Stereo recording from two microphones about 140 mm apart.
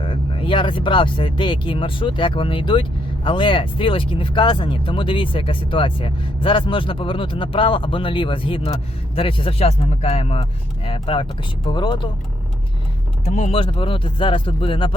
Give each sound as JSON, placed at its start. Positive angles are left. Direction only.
{"t": 0.0, "sound": "speech", "side_deg": 40}
{"t": 13.2, "sound": "speech", "side_deg": 60}
{"t": 13.5, "sound": "speech", "side_deg": 40}